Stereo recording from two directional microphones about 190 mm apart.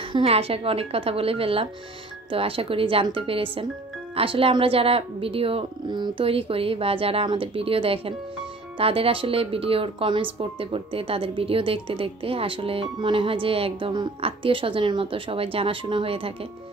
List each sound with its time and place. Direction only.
0.1 s speech: 30° right (ahead or behind)